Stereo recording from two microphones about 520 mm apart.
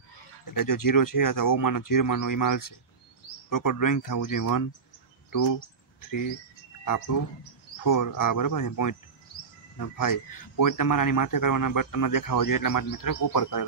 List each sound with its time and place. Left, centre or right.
0.5 s a man's voice: left
7.8 s a man's voice: left